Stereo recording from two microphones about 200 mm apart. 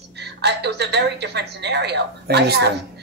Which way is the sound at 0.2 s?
55° right (ahead or behind).